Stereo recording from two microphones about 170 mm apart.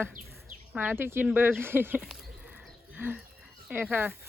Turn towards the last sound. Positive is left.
turn(degrees=-10)  # may be behind; listen again after turning